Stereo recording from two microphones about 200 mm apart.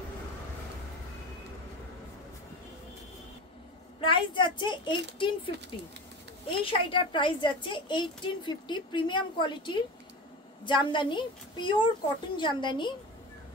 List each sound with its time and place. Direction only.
4.0 s a woman's voice: 25° left (ahead or behind)